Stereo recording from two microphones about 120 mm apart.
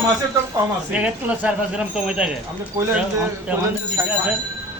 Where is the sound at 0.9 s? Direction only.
10° right (ahead or behind).